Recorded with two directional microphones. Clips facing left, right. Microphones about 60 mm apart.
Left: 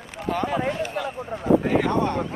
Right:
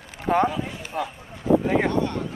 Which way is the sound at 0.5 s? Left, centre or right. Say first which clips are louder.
Left 6 dB; left.